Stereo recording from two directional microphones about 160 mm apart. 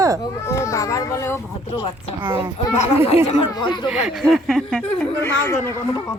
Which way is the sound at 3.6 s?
25° left (ahead or behind).